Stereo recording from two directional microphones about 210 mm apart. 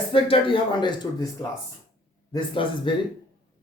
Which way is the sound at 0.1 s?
25° left (ahead or behind).